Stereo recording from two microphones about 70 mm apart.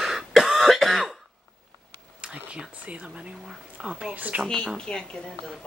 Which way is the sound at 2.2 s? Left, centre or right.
Centre.